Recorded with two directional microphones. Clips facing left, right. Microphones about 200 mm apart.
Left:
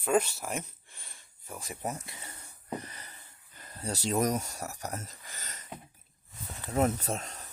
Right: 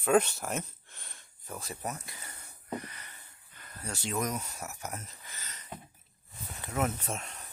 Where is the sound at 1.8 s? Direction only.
25° left (ahead or behind).